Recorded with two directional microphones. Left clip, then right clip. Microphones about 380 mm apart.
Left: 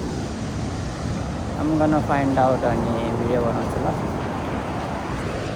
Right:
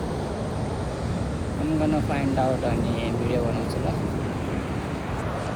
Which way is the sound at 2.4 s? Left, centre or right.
Left.